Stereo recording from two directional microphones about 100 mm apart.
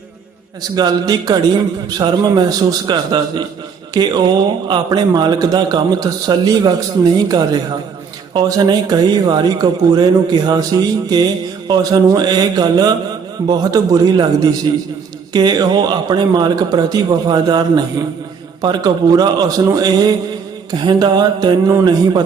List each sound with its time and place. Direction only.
0.6 s a man's voice: 40° right (ahead or behind)